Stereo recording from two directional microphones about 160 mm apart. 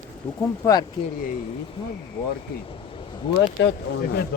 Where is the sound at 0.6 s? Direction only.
25° left (ahead or behind).